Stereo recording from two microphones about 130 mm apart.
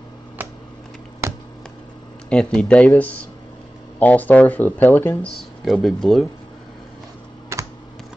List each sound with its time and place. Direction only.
0.4 s a sound: 15° right (ahead or behind)
2.2 s speech: 5° left (ahead or behind)
7.5 s computer keyboard: 20° right (ahead or behind)